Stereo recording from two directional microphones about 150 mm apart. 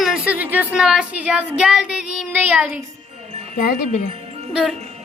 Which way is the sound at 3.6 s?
60° left (ahead or behind).